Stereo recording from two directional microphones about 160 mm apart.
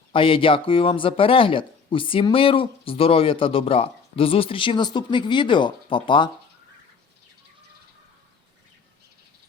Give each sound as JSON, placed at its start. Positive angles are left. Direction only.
{"t": 0.1, "sound": "speech", "side_deg": 35}